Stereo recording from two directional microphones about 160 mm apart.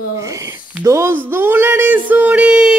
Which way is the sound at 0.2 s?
20° right (ahead or behind).